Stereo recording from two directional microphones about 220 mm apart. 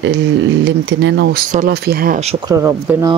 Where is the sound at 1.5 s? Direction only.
40° right (ahead or behind).